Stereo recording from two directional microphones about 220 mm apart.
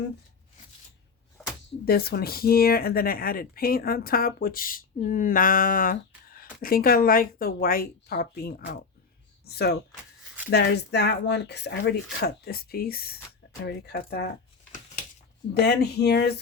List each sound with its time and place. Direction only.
1.8 s speech: 45° left (ahead or behind)
15.5 s speech: 45° left (ahead or behind)